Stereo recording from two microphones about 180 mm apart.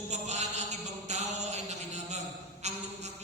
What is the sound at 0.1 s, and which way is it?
Mantra, 40° right (ahead or behind).